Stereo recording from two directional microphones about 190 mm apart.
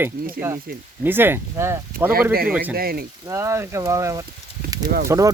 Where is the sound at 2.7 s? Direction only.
50° right (ahead or behind).